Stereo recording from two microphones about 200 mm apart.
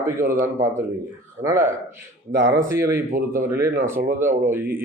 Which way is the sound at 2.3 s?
60° right (ahead or behind).